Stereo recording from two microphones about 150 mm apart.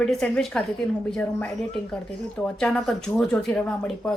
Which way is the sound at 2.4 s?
5° left (ahead or behind).